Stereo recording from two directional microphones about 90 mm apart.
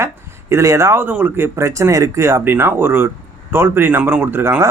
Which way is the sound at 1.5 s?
30° right (ahead or behind).